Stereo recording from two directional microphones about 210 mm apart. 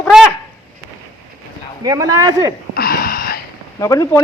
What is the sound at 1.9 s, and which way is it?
Speech, 15° right (ahead or behind).